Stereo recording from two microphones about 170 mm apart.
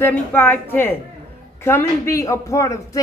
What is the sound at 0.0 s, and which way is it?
A woman's voice, 10° left (ahead or behind).